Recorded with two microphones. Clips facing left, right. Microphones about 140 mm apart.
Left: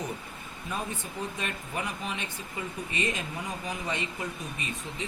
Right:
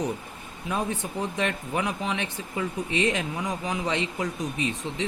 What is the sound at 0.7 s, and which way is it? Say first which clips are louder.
Speech: right 6 dB; 75° right (ahead or behind).